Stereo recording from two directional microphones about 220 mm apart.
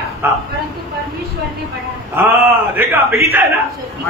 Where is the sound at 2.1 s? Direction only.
10° right (ahead or behind).